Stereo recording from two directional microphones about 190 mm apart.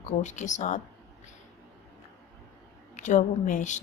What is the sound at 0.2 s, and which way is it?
Speech, 40° left (ahead or behind).